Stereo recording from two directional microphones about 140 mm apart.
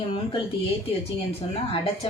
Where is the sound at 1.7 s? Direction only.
40° left (ahead or behind).